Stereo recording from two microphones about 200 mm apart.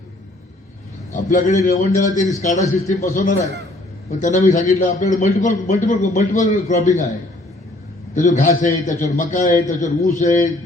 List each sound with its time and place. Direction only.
1.1 s a man's voice: 40° left (ahead or behind)
8.1 s a man's voice: 40° left (ahead or behind)